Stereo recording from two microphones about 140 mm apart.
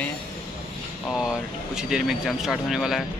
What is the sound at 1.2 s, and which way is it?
Speech, 5° right (ahead or behind).